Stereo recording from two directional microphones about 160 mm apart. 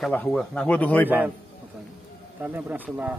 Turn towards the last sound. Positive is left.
turn(degrees=-10)  # may be behind; listen again after turning